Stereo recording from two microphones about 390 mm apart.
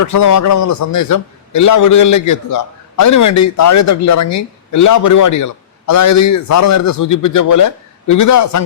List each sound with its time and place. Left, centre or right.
0.0 s a man's voice: left